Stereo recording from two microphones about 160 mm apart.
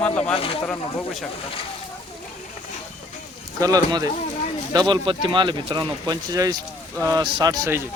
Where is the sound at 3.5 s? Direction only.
20° right (ahead or behind).